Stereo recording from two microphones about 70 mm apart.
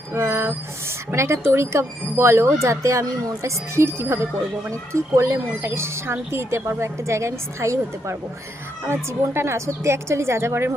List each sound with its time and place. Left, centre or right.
0.1 s a woman's voice: right